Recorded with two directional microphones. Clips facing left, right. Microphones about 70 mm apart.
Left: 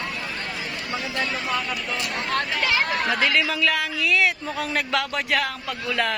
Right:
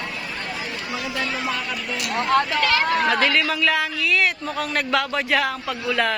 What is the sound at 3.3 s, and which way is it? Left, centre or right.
A man's voice, centre.